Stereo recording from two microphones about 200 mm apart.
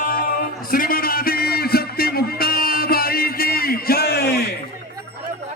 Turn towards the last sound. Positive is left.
turn(degrees=55)  # may be behind; listen again after turning